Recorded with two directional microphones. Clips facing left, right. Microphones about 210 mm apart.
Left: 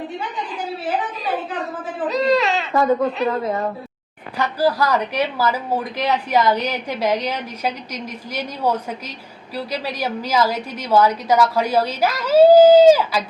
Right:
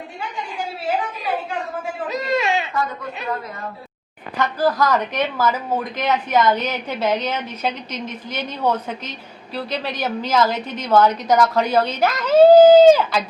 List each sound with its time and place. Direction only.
1.2 s a sound: centre (ahead or behind)
2.0 s baby cry: centre (ahead or behind)
2.7 s a woman's voice: 50° left (ahead or behind)
4.4 s a woman's voice: 10° left (ahead or behind)